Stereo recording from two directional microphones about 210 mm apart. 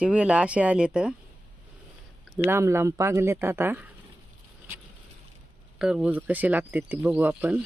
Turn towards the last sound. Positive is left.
turn(degrees=-10)  # may be behind; listen again after turning